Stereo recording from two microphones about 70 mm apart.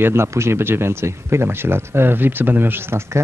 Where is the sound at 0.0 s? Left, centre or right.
Right.